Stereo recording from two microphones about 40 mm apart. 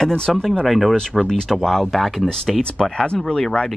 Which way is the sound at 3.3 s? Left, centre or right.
Centre.